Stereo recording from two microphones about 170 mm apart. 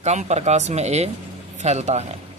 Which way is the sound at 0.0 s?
40° right (ahead or behind).